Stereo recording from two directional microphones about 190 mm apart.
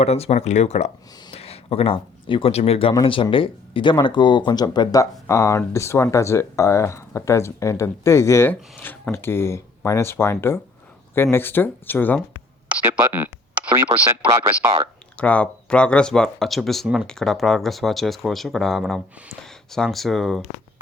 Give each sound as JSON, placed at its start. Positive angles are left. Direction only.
{"t": 0.0, "sound": "speech", "side_deg": 35}
{"t": 12.6, "sound": "a sound", "side_deg": -10}
{"t": 13.9, "sound": "speech", "side_deg": -10}
{"t": 15.2, "sound": "speech", "side_deg": 5}